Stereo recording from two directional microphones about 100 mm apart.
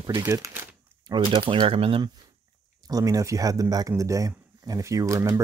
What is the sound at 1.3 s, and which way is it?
Speech, 65° right (ahead or behind).